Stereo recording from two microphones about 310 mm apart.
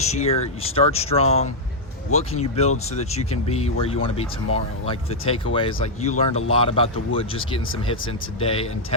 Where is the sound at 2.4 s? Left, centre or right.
Left.